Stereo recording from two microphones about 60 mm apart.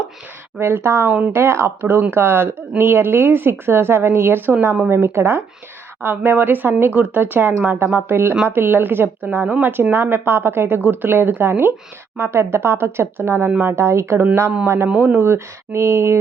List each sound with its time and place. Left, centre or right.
0.6 s speech: right
6.0 s speech: right
10.8 s speech: right
14.9 s speech: right